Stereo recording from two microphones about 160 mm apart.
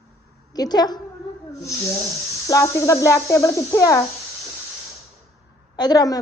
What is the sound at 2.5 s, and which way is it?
A woman's voice, 20° left (ahead or behind).